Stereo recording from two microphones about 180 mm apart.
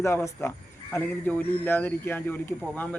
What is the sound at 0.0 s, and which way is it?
Speech, 15° left (ahead or behind).